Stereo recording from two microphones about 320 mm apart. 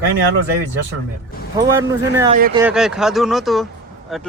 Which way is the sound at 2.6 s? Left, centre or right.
Centre.